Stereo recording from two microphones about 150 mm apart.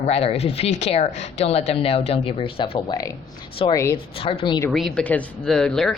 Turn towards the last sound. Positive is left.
turn(degrees=5)  # may be behind; listen again after turning